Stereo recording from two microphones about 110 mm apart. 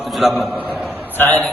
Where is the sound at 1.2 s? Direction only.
15° left (ahead or behind).